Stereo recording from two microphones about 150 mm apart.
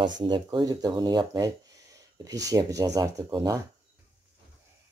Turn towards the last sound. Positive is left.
turn(degrees=-25)  # may be behind; listen again after turning